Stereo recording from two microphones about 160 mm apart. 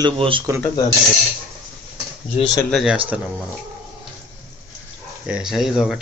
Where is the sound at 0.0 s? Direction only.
30° right (ahead or behind).